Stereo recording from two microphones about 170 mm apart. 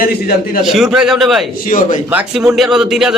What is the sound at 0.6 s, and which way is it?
Speech, centre (ahead or behind).